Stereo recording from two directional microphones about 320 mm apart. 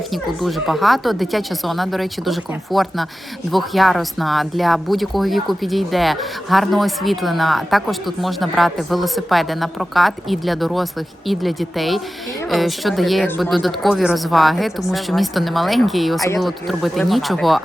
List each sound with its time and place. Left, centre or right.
0.1 s a woman's voice: centre